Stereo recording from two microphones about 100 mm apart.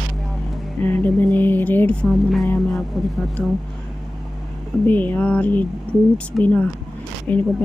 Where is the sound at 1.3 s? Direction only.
20° left (ahead or behind).